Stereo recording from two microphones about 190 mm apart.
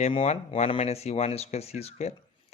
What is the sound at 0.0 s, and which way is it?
Speech, 30° left (ahead or behind).